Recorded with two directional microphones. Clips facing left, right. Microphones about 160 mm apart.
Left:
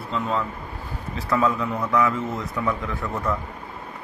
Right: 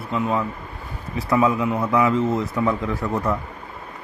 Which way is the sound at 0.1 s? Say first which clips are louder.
Right 3 dB; 10° right (ahead or behind).